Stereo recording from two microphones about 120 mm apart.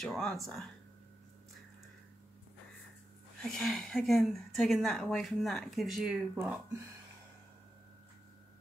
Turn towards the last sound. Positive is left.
turn(degrees=-15)  # may be behind; listen again after turning